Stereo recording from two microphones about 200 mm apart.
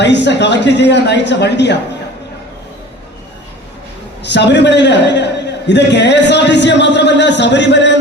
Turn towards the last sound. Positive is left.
turn(degrees=60)  # may be behind; listen again after turning